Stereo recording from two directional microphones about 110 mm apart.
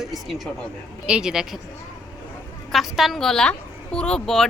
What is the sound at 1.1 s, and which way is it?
Speech, 5° right (ahead or behind).